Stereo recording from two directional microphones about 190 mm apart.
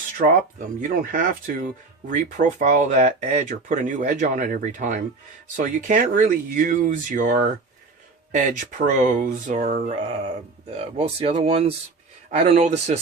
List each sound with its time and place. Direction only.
0.8 s speech: 45° right (ahead or behind)
9.9 s speech: 30° right (ahead or behind)